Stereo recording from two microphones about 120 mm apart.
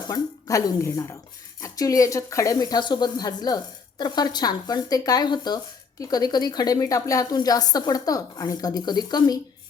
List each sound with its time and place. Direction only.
0.1 s a woman's voice: 30° left (ahead or behind)